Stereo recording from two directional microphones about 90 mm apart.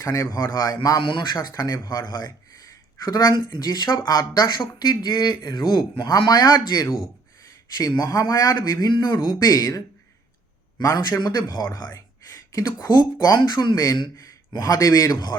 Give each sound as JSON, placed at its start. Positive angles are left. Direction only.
{"t": 0.0, "sound": "a man's voice", "side_deg": 35}
{"t": 0.5, "sound": "speech", "side_deg": 45}
{"t": 1.0, "sound": "speech", "side_deg": 55}
{"t": 8.0, "sound": "speech", "side_deg": 40}
{"t": 10.8, "sound": "a man's voice", "side_deg": 35}
{"t": 11.2, "sound": "speech", "side_deg": 50}
{"t": 11.7, "sound": "a sound", "side_deg": 40}
{"t": 12.9, "sound": "a man's voice", "side_deg": 50}